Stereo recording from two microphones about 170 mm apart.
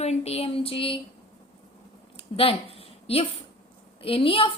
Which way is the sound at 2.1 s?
35° left (ahead or behind).